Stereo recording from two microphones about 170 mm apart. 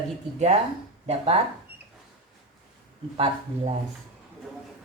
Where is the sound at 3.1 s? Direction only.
35° right (ahead or behind).